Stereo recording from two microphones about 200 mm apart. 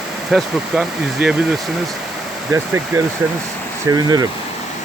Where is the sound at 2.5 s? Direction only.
15° right (ahead or behind).